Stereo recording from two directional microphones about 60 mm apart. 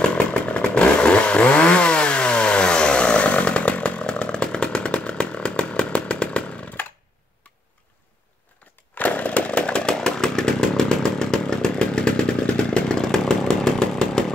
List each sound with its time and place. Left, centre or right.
0.0 s chainsaw: centre
8.9 s chainsaw: left; by 14.2 s centre